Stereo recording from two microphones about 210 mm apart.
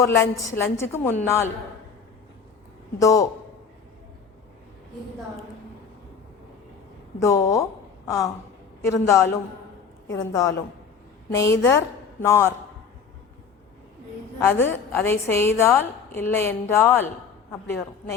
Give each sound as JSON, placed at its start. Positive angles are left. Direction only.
{"t": 0.0, "sound": "a woman's voice", "side_deg": 15}
{"t": 3.0, "sound": "a woman's voice", "side_deg": 15}
{"t": 7.2, "sound": "a woman's voice", "side_deg": 15}
{"t": 14.3, "sound": "a woman's voice", "side_deg": 10}